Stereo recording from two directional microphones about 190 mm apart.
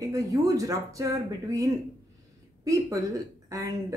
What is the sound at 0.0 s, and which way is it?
Speech, 20° right (ahead or behind).